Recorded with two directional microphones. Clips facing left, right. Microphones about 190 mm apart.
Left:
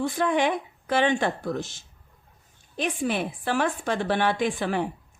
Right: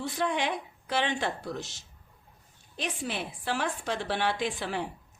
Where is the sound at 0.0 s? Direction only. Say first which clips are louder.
Left 6 dB; 50° left (ahead or behind).